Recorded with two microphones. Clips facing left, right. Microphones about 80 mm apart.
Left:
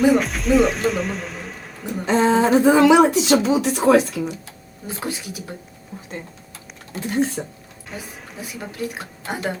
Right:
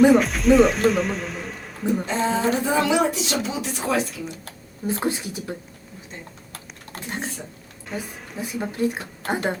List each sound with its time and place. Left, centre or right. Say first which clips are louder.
0.0 s a man's voice: right 2 dB; centre
2.0 s a sound: left 12 dB; left
2.3 s speech: left 7 dB; left
4.9 s speech: even; right
6.9 s speech: left 7 dB; right
7.4 s speech: left 8 dB; left
7.9 s a woman's voice: right 3 dB; centre
8.7 s speech: right 4 dB; right